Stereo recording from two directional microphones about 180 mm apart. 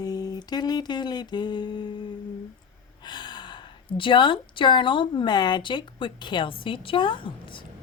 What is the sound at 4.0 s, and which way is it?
A woman's voice, 25° left (ahead or behind).